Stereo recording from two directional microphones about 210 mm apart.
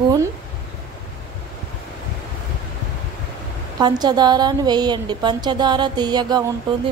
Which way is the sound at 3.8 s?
20° right (ahead or behind).